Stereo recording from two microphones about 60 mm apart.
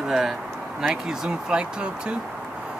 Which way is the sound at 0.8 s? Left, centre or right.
Centre.